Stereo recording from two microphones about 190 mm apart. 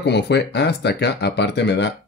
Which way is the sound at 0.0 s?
65° left (ahead or behind).